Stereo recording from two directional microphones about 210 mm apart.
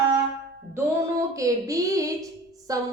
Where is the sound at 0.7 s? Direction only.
15° right (ahead or behind).